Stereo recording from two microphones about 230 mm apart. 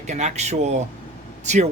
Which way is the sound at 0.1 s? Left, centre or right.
Right.